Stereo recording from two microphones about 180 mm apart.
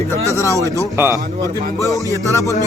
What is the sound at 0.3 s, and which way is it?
Speech, 15° left (ahead or behind).